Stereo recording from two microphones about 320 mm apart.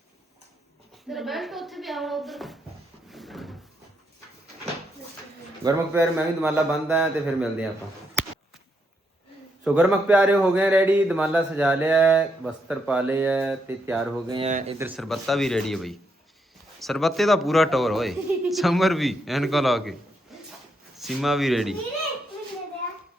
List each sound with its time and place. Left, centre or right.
1.1 s speech: centre
3.1 s door: centre
5.6 s speech: centre
9.6 s speech: centre
14.3 s speech: centre
14.8 s speech: centre
20.3 s a sound: centre
20.9 s speech: centre